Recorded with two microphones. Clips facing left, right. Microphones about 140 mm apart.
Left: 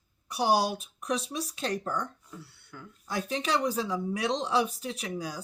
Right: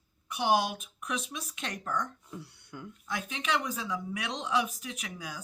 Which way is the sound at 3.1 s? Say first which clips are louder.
Left 3 dB; 35° left (ahead or behind).